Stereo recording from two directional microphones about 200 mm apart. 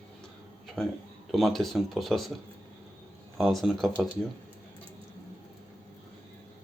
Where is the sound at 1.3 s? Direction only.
Centre (ahead or behind).